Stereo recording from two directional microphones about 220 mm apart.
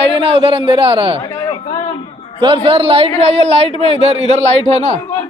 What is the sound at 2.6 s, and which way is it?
A man's voice, 25° right (ahead or behind).